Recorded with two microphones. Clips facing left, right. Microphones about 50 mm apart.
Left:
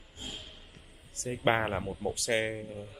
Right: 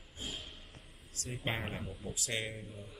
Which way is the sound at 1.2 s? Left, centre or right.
Left.